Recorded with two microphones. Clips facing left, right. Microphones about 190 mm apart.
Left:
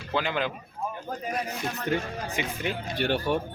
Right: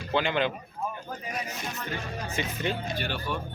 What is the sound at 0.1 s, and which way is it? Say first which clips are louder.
Speech: right 2 dB; centre (ahead or behind).